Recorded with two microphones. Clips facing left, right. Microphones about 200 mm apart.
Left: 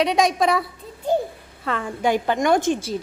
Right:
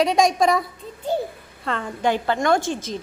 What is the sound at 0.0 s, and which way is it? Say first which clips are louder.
Speech: right 1 dB; centre (ahead or behind).